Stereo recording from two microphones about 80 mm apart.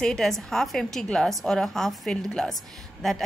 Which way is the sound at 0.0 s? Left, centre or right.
Centre.